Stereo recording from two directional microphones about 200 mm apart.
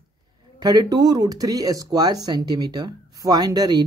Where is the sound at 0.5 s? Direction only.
20° right (ahead or behind).